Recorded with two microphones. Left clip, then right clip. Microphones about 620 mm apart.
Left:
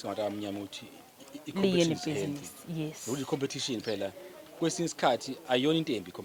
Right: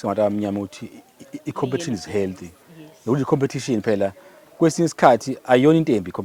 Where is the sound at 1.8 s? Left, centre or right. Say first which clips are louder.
Right 7 dB; right.